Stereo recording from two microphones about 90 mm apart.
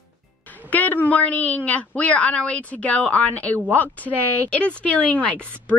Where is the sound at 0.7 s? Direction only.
20° left (ahead or behind).